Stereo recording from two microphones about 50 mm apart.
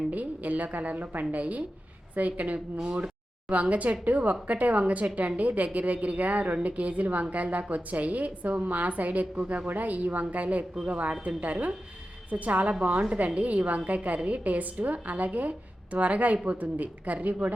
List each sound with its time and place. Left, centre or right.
0.1 s a woman's voice: right